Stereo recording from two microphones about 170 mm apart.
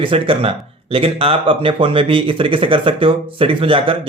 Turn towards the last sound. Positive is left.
turn(degrees=-30)  # may be behind; listen again after turning